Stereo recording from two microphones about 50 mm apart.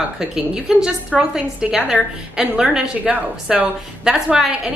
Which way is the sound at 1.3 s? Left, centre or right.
Centre.